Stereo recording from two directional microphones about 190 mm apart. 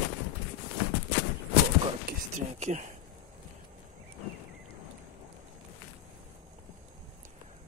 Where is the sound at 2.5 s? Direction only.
35° right (ahead or behind).